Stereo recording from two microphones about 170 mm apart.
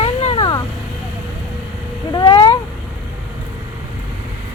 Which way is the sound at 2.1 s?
30° left (ahead or behind).